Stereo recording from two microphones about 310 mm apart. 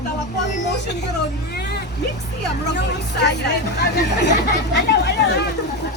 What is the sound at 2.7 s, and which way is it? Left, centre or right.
Speech, left.